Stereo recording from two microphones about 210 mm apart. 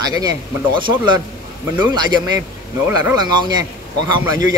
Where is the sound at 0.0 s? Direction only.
15° right (ahead or behind).